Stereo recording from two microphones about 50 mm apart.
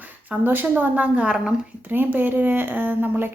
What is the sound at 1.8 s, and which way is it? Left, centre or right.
A woman's voice, right.